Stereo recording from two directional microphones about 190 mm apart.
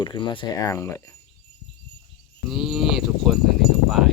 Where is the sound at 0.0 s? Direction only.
25° left (ahead or behind).